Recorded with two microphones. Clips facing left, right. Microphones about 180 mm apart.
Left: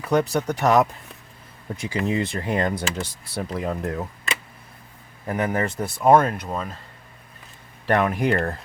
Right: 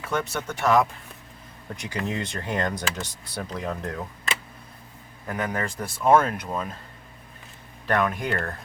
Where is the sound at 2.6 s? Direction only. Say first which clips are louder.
Left 3 dB; 10° left (ahead or behind).